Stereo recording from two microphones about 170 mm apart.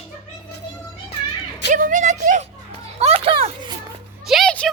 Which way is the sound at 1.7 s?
50° right (ahead or behind).